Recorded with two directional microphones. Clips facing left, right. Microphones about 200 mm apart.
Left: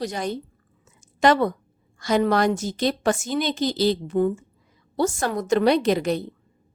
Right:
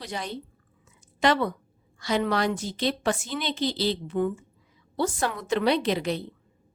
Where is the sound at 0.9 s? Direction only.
45° left (ahead or behind).